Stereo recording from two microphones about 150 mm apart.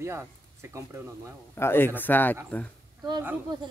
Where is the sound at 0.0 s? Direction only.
15° right (ahead or behind).